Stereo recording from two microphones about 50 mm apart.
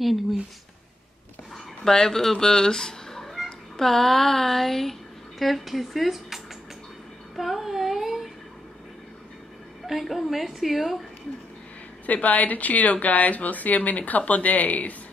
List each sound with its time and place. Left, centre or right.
0.0 s a woman's voice: centre
1.9 s a woman's voice: centre
7.3 s a sound: centre
9.8 s a woman's voice: centre
12.1 s speech: left